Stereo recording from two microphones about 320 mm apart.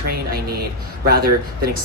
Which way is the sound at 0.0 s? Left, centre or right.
Right.